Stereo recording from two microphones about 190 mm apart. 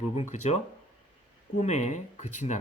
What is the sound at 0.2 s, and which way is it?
Speech, 35° left (ahead or behind).